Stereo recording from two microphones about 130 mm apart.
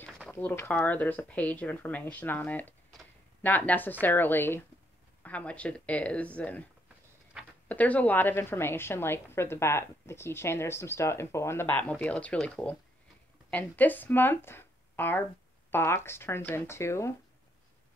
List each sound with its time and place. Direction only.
0.3 s a woman's voice: 15° left (ahead or behind)
7.6 s a woman's voice: 10° left (ahead or behind)